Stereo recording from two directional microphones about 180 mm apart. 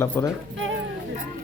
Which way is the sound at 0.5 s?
90° right.